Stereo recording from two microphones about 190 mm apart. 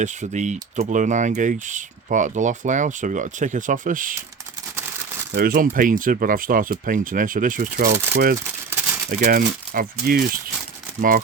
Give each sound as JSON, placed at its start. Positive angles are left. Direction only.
{"t": 0.0, "sound": "speech", "side_deg": -40}
{"t": 5.3, "sound": "speech", "side_deg": -50}
{"t": 8.7, "sound": "a sound", "side_deg": -10}
{"t": 9.0, "sound": "speech", "side_deg": -45}